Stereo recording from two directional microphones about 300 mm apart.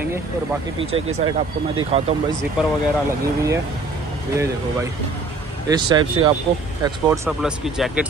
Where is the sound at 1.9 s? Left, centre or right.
Centre.